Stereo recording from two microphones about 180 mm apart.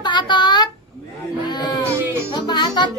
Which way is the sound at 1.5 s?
25° left (ahead or behind).